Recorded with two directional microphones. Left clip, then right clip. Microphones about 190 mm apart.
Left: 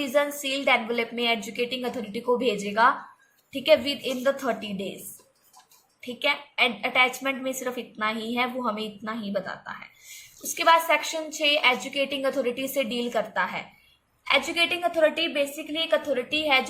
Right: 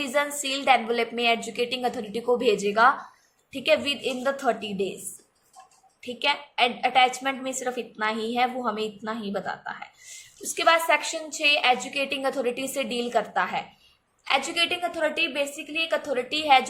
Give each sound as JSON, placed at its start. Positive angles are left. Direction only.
{"t": 0.0, "sound": "a woman's voice", "side_deg": -15}
{"t": 6.0, "sound": "a woman's voice", "side_deg": -10}